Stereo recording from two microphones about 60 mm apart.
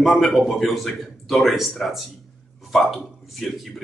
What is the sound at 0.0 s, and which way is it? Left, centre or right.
Speech, centre.